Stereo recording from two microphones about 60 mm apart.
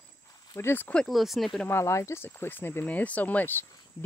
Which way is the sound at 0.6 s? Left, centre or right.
Left.